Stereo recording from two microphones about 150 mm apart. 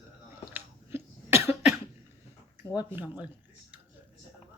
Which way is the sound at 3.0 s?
10° right (ahead or behind).